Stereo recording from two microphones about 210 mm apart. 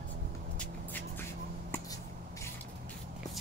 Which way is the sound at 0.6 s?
10° left (ahead or behind).